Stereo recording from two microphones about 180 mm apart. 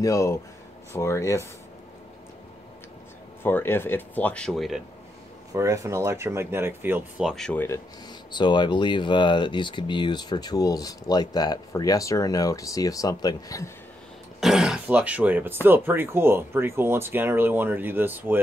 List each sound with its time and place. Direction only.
0.0 s speech: 15° left (ahead or behind)
3.4 s speech: 10° left (ahead or behind)
5.5 s speech: 15° right (ahead or behind); by 7.6 s 5° left (ahead or behind)
7.6 s speech: 20° left (ahead or behind)
14.4 s speech: centre (ahead or behind)